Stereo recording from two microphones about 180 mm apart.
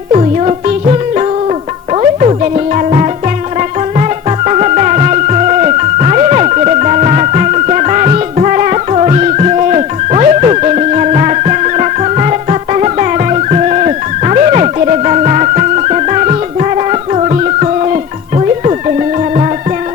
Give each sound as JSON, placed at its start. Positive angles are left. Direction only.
{"t": 0.1, "sound": "music", "side_deg": -40}